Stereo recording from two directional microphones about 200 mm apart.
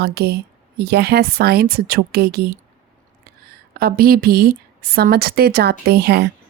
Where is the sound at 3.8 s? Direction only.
50° right (ahead or behind).